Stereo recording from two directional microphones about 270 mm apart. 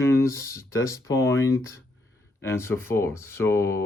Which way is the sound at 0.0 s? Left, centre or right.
Centre.